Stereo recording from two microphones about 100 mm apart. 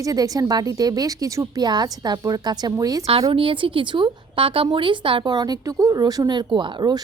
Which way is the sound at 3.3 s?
60° right (ahead or behind).